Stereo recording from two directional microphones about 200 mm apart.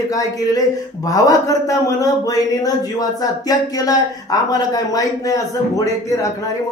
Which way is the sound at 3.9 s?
20° left (ahead or behind).